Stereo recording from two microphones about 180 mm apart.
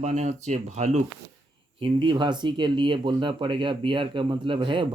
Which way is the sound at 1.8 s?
30° right (ahead or behind).